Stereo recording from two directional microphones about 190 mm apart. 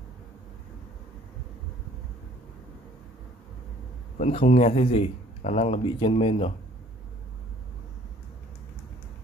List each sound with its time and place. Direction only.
4.2 s speech: 35° left (ahead or behind)